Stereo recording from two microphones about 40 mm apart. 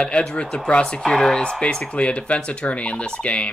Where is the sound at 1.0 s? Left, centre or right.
Centre.